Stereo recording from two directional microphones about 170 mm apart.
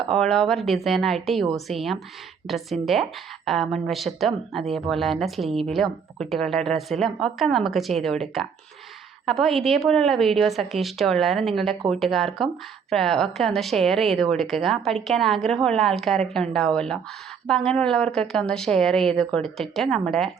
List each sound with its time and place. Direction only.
0.1 s a woman's voice: 5° left (ahead or behind)